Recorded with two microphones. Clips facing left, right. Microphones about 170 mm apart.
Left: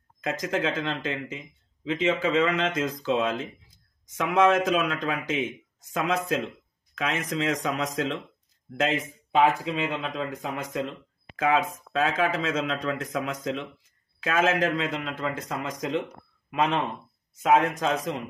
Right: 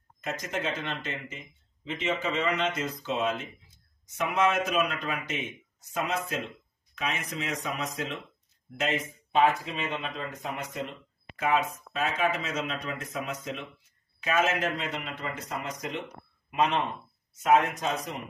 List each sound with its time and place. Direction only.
0.2 s speech: 90° left
2.1 s a man's voice: 90° left